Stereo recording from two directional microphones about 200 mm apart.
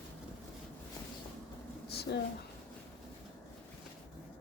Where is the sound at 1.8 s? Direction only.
55° left (ahead or behind).